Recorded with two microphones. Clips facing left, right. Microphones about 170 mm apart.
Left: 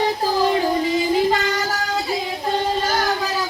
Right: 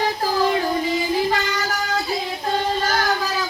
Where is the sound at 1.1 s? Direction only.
20° left (ahead or behind).